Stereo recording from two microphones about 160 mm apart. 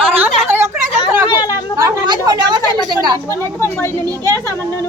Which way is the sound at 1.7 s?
25° right (ahead or behind).